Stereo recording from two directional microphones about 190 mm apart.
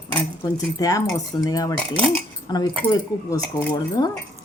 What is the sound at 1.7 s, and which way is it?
Speech, 5° left (ahead or behind).